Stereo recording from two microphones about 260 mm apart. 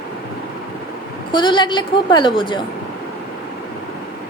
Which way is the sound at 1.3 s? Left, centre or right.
Centre.